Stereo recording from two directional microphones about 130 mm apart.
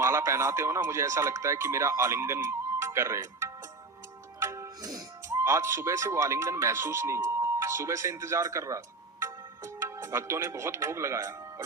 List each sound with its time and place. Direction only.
0.0 s speech: 20° right (ahead or behind)
9.2 s music: 20° right (ahead or behind)